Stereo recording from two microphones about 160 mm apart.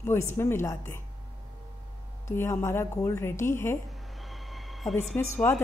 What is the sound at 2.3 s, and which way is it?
A woman's voice, 15° left (ahead or behind).